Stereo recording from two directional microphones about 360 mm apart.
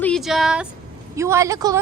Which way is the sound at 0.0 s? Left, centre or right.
Centre.